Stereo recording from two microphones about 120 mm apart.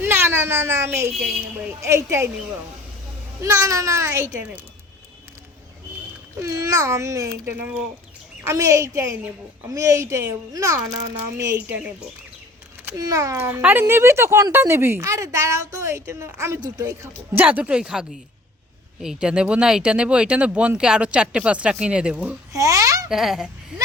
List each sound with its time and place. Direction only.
0.0 s a child's voice: 20° right (ahead or behind)
3.4 s a woman's voice: 25° right (ahead or behind)
6.4 s a woman's voice: 25° right (ahead or behind)
8.4 s a woman's voice: 25° right (ahead or behind)
13.0 s a woman's voice: 30° right (ahead or behind); by 18.0 s 5° right (ahead or behind)
19.0 s speech: 5° right (ahead or behind)
22.5 s babbling: 25° right (ahead or behind)
23.0 s speech: 5° right (ahead or behind)